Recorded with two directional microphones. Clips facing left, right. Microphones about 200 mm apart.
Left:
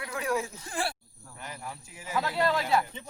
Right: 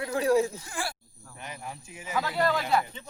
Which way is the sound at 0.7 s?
30° left (ahead or behind).